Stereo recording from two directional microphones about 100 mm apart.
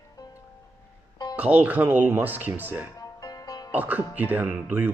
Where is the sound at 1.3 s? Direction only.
15° right (ahead or behind).